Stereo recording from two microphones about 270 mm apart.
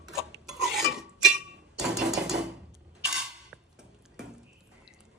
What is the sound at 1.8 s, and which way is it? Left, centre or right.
Typewriter, centre.